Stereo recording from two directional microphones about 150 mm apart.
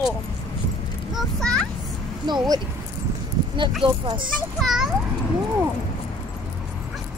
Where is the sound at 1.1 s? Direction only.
5° left (ahead or behind).